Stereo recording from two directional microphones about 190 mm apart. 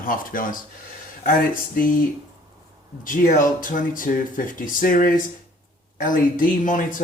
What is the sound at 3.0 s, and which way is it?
Speech, 45° left (ahead or behind).